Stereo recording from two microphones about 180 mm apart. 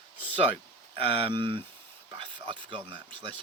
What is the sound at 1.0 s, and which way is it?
Speech, 30° right (ahead or behind).